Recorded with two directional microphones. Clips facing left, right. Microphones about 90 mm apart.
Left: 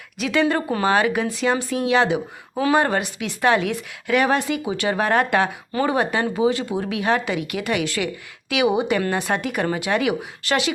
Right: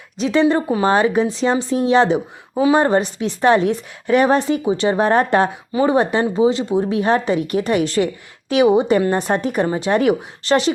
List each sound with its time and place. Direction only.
0.2 s a woman's voice: 30° right (ahead or behind)
5.7 s speech: 20° right (ahead or behind)
6.0 s a woman's voice: 30° right (ahead or behind)